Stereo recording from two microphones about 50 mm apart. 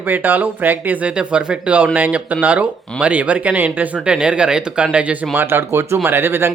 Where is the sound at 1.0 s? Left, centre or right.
Right.